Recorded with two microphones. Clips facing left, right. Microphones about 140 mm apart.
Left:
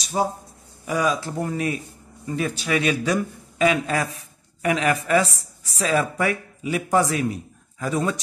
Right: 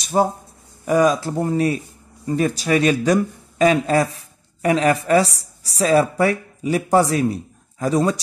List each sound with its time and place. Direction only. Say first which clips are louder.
0.0 s speech: right 5 dB; 50° right (ahead or behind); by 8.2 s 35° right (ahead or behind)